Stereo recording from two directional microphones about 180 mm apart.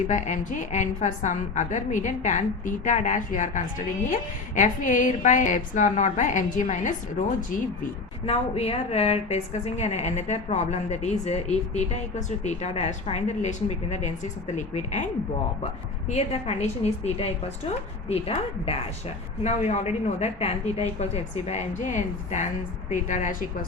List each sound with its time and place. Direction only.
0.1 s a woman's voice: 45° left (ahead or behind)
8.3 s a woman's voice: 35° left (ahead or behind)
16.0 s a woman's voice: 35° left (ahead or behind)